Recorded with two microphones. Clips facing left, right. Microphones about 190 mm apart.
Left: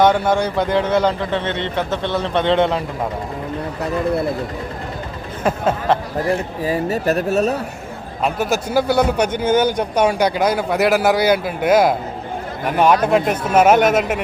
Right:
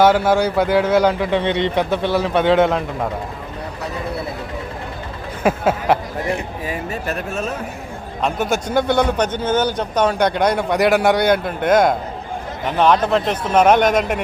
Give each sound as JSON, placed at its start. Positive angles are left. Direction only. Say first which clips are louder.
{"t": 0.0, "sound": "speech", "louder": "right 1 dB", "side_deg": -5}
{"t": 5.4, "sound": "speech", "louder": "right 1 dB", "side_deg": -10}
{"t": 6.7, "sound": "speech", "louder": "left 8 dB", "side_deg": 40}
{"t": 8.2, "sound": "a man's voice", "louder": "left 1 dB", "side_deg": 5}